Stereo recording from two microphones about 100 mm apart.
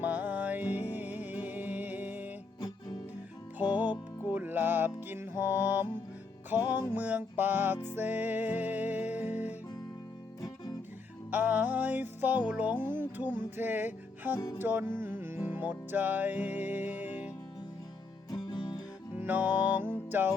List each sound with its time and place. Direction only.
0.0 s music: 15° right (ahead or behind)
4.3 s music: 15° right (ahead or behind)
11.3 s music: 15° right (ahead or behind)
14.3 s music: 35° left (ahead or behind)
14.6 s music: 20° right (ahead or behind)
18.3 s music: 45° left (ahead or behind)
19.1 s music: 15° right (ahead or behind)